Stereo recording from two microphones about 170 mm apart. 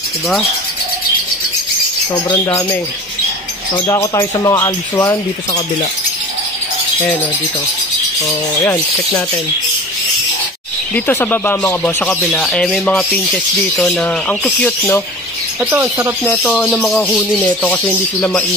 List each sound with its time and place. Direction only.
2.2 s speech: 20° left (ahead or behind)
3.8 s speech: 20° left (ahead or behind)
8.6 s speech: 10° left (ahead or behind)
11.1 s speech: 10° left (ahead or behind)
15.6 s speech: 10° right (ahead or behind)
16.3 s speech: 5° left (ahead or behind)